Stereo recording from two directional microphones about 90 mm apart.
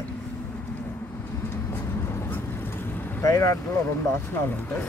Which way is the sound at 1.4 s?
25° left (ahead or behind).